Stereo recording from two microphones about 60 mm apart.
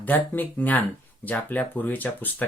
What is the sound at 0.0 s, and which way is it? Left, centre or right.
Speech, left.